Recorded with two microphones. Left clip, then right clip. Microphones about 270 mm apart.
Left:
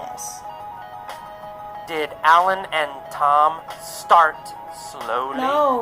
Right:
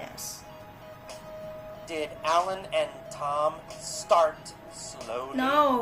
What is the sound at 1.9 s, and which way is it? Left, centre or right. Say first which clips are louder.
Music: left 11 dB; left.